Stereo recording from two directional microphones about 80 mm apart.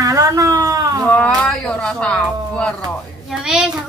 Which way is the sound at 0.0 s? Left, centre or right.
Right.